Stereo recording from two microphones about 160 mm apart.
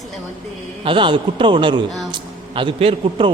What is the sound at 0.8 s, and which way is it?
A man's voice, 30° right (ahead or behind).